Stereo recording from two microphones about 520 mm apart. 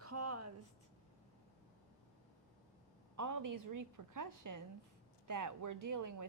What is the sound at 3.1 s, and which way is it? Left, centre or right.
Speech, right.